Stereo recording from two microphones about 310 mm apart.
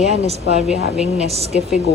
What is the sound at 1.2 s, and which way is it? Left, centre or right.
Speech, centre.